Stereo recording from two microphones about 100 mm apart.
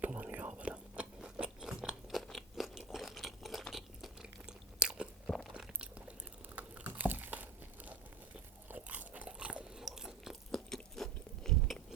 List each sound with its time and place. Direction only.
0.0 s biting: 15° right (ahead or behind)
6.6 s a sound: 15° right (ahead or behind)
8.7 s crunch: 15° right (ahead or behind); by 11.9 s centre (ahead or behind)